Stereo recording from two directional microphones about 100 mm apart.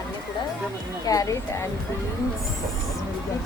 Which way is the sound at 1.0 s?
35° left (ahead or behind).